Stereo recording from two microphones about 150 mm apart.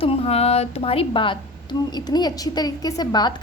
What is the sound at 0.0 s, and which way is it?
A woman's voice, 40° left (ahead or behind).